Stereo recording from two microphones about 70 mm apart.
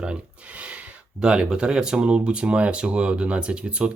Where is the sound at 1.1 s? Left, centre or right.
Centre.